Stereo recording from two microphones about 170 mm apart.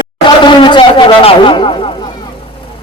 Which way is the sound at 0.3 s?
25° left (ahead or behind).